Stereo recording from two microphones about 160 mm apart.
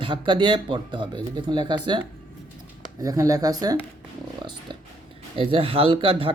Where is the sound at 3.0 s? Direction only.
20° right (ahead or behind).